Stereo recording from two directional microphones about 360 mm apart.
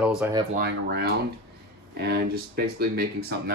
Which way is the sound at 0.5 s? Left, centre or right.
Right.